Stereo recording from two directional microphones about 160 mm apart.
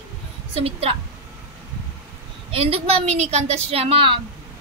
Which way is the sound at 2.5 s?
35° right (ahead or behind).